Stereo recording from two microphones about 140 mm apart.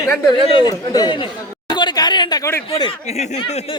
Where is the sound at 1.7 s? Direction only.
30° left (ahead or behind).